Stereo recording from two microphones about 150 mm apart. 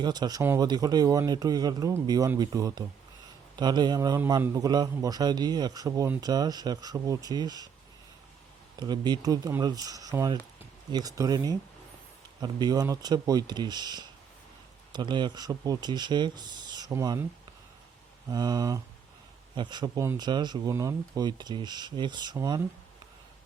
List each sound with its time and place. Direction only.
0.0 s speech: 30° right (ahead or behind)
8.8 s speech: 30° right (ahead or behind)
18.3 s speech: 25° right (ahead or behind)